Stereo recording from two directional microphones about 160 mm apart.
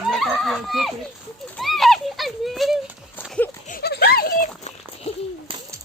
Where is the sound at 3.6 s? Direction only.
75° left (ahead or behind).